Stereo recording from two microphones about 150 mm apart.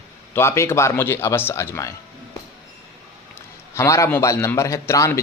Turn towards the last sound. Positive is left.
turn(degrees=20)  # may be behind; listen again after turning